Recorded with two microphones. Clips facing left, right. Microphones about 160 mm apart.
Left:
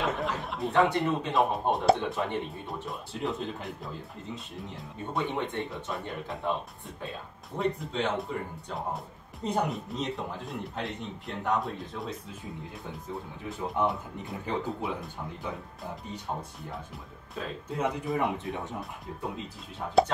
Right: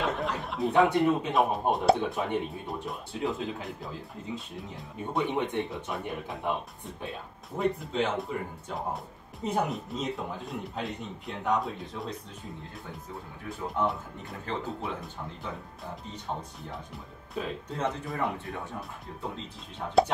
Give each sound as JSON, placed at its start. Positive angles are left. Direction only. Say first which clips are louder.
{"t": 0.0, "sound": "chuckle", "louder": "even", "side_deg": 0}
{"t": 1.3, "sound": "speech", "louder": "even", "side_deg": 0}
{"t": 4.9, "sound": "speech", "louder": "right 2 dB", "side_deg": -15}
{"t": 7.5, "sound": "speech", "louder": "right 2 dB", "side_deg": 0}
{"t": 13.5, "sound": "speech", "louder": "left 1 dB", "side_deg": 20}
{"t": 14.8, "sound": "speech", "louder": "left 2 dB", "side_deg": 0}
{"t": 17.6, "sound": "speech", "louder": "left 6 dB", "side_deg": 10}
{"t": 18.1, "sound": "speech", "louder": "left 3 dB", "side_deg": 20}
{"t": 18.8, "sound": "speech", "louder": "left 1 dB", "side_deg": 0}